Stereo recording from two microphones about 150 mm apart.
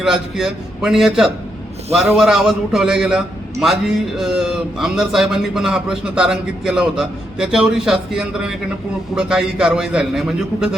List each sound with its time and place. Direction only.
0.0 s a man's voice: 5° right (ahead or behind)